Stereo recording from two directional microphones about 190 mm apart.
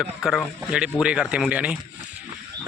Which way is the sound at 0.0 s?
Centre (ahead or behind).